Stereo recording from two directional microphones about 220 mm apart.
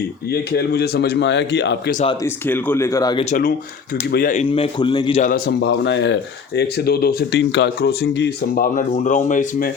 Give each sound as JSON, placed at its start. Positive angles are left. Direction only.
{"t": 0.3, "sound": "speech", "side_deg": 45}
{"t": 2.2, "sound": "speech", "side_deg": 10}
{"t": 3.2, "sound": "speech", "side_deg": 40}
{"t": 4.4, "sound": "a man's voice", "side_deg": 25}
{"t": 5.2, "sound": "speech", "side_deg": 45}